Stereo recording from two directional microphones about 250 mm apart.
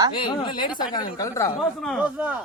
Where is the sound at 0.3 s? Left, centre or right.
Centre.